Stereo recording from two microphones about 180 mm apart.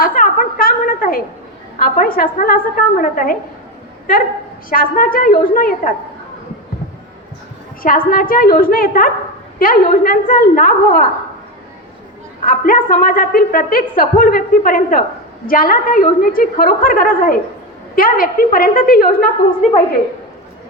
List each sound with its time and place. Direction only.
0.0 s a sound: 50° left (ahead or behind)
1.8 s a woman's voice: 50° left (ahead or behind)
4.7 s a woman's voice: 50° left (ahead or behind)
7.8 s a woman's voice: 50° left (ahead or behind)
12.5 s a woman's voice: 50° left (ahead or behind)